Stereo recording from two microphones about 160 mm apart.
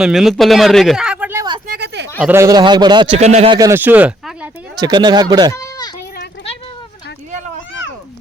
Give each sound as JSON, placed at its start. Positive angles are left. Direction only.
{"t": 0.0, "sound": "speech", "side_deg": 0}
{"t": 1.6, "sound": "a sound", "side_deg": -80}
{"t": 2.2, "sound": "a man's voice", "side_deg": -15}
{"t": 3.2, "sound": "speech", "side_deg": -45}
{"t": 3.5, "sound": "speech", "side_deg": -20}
{"t": 4.8, "sound": "a man's voice", "side_deg": -25}
{"t": 5.5, "sound": "goat", "side_deg": 25}